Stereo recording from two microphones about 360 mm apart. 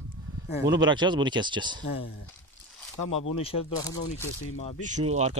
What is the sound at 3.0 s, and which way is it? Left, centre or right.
Speech, left.